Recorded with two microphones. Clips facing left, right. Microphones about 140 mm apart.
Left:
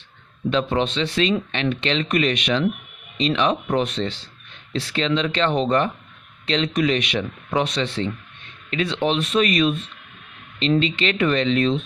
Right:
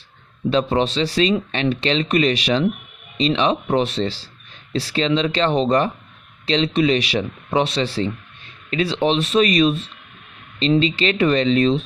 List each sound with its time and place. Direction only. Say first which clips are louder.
0.5 s speech: right 3 dB; 35° right (ahead or behind)
11.0 s speech: right 3 dB; 35° right (ahead or behind)